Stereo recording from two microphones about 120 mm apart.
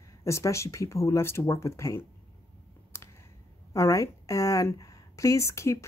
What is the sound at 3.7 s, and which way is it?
A woman's voice, 25° left (ahead or behind).